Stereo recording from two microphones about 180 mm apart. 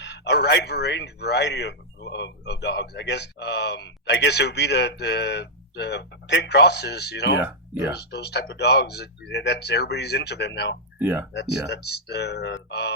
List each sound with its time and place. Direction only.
0.0 s speech: 70° left (ahead or behind)
11.0 s speech: 10° right (ahead or behind)
11.7 s speech: 70° left (ahead or behind)